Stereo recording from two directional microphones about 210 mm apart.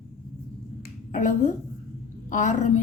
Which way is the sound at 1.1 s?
35° left (ahead or behind).